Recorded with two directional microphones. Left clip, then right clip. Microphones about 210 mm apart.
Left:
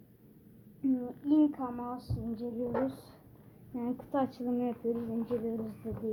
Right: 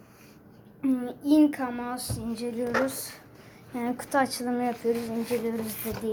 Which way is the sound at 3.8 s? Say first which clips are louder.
Right 7 dB; centre (ahead or behind).